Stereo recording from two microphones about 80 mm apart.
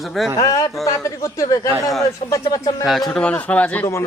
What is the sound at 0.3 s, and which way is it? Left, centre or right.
Speech, left.